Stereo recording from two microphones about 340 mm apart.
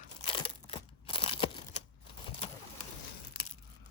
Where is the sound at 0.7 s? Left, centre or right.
Centre.